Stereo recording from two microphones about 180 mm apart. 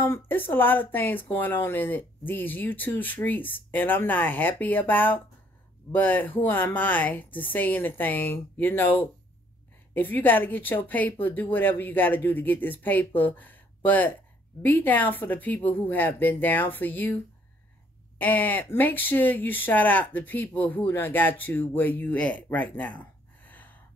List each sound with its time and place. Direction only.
0.0 s speech: 10° left (ahead or behind)